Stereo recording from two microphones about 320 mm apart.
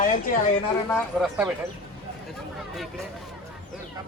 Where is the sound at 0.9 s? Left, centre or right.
Centre.